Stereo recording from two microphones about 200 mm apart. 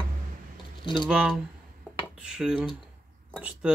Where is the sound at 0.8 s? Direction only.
25° left (ahead or behind).